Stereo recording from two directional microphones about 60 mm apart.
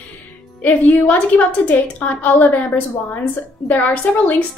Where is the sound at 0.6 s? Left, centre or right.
Left.